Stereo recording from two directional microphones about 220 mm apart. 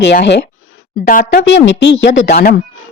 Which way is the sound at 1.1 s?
40° left (ahead or behind).